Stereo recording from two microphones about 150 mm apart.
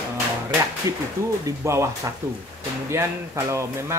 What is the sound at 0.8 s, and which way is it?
Speech, 20° right (ahead or behind).